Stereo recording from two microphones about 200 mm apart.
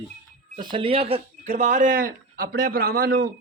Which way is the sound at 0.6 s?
25° right (ahead or behind).